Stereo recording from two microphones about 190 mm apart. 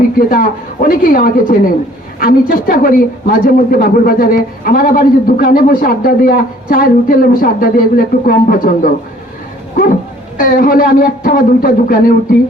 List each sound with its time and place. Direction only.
0.2 s a man's voice: 50° left (ahead or behind)